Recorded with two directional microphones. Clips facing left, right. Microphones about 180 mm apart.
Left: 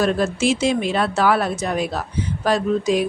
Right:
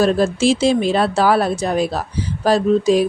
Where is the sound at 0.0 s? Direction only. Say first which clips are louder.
Right 4 dB; 30° right (ahead or behind).